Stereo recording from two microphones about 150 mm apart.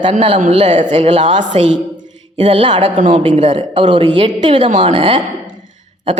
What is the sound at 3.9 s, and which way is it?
A man's voice, 30° right (ahead or behind).